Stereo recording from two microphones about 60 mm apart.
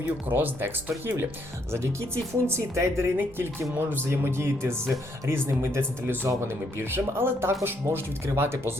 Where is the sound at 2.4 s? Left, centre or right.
Right.